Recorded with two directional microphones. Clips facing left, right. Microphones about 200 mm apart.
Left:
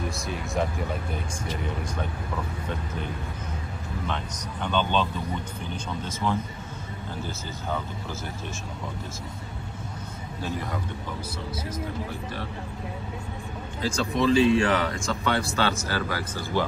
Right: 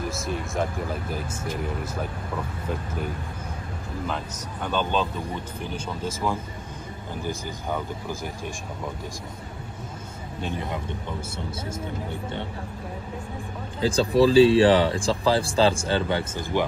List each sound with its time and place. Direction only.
0.1 s speech: centre (ahead or behind)
4.1 s speech: 5° right (ahead or behind)
6.0 s a man's voice: 10° right (ahead or behind)
13.7 s speech: 30° right (ahead or behind)